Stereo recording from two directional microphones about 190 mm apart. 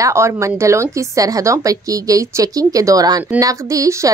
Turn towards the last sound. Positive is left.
turn(degrees=-15)  # may be behind; listen again after turning